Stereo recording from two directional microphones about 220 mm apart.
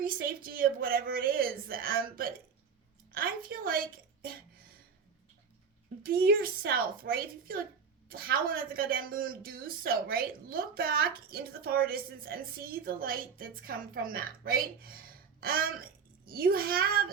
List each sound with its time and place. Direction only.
0.0 s a woman's voice: 40° right (ahead or behind)
6.0 s a woman's voice: 45° right (ahead or behind)